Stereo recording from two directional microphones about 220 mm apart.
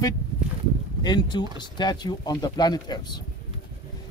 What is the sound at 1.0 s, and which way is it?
Speech, 20° left (ahead or behind).